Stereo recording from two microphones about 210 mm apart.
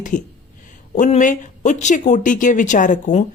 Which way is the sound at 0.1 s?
40° left (ahead or behind).